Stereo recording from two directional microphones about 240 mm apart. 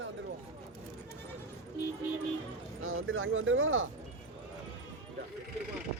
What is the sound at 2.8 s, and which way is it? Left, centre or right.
Speech, right.